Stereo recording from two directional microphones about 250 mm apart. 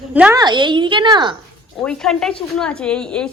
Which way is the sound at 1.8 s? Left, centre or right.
Centre.